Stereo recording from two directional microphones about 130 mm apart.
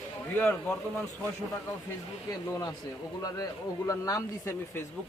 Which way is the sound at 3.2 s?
25° left (ahead or behind).